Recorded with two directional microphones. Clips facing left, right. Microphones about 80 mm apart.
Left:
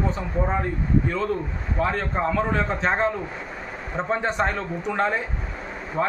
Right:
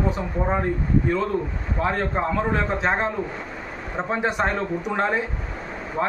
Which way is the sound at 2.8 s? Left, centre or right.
Centre.